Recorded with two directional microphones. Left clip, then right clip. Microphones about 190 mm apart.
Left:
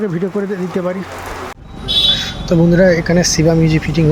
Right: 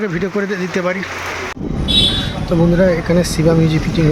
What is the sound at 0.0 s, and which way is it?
Speech, 15° left (ahead or behind).